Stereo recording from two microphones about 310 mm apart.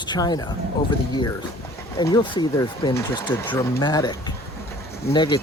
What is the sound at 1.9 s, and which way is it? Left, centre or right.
Speech, centre.